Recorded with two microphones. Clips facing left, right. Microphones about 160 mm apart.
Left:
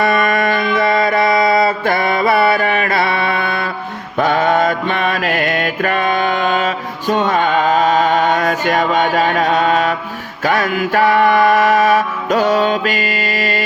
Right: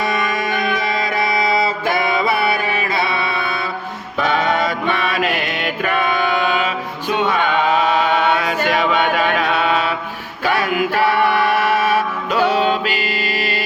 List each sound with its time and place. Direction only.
0.0 s mantra: 55° left (ahead or behind)
10.4 s music: 45° left (ahead or behind)